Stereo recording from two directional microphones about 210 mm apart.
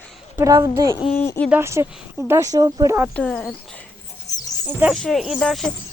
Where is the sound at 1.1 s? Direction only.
10° left (ahead or behind).